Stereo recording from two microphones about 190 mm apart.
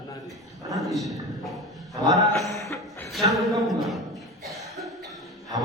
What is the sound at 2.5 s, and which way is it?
Music, 15° left (ahead or behind).